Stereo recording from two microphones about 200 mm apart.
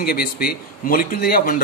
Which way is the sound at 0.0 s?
50° left (ahead or behind).